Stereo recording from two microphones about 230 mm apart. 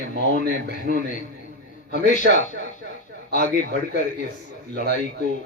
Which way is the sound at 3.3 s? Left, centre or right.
Left.